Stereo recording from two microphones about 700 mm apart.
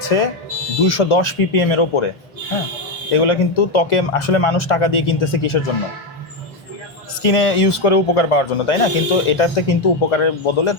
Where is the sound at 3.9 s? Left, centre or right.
Left.